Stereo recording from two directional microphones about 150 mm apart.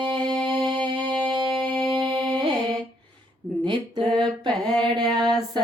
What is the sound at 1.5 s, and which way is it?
Music, 10° left (ahead or behind).